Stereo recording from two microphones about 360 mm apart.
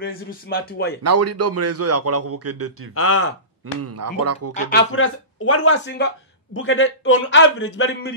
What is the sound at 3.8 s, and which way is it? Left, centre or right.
Speech, right.